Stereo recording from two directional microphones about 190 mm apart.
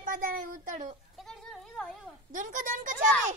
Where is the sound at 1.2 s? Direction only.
Centre (ahead or behind).